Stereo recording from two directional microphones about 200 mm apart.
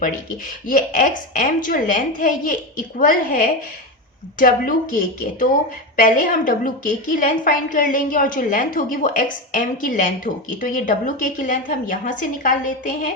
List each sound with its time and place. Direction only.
0.7 s a woman's voice: 40° left (ahead or behind)